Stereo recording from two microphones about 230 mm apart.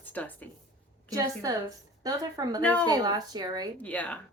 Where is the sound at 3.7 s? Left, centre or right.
Centre.